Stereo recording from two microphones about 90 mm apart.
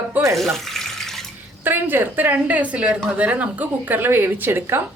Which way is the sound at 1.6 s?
25° right (ahead or behind).